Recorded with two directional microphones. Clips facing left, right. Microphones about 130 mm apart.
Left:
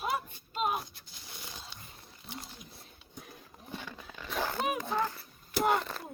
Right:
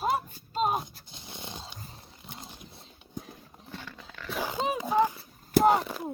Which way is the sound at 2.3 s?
25° right (ahead or behind).